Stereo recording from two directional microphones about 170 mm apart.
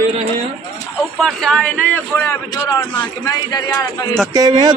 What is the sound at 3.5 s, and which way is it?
Speech, 20° left (ahead or behind).